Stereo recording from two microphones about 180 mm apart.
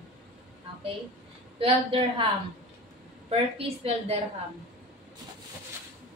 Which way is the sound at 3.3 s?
35° right (ahead or behind).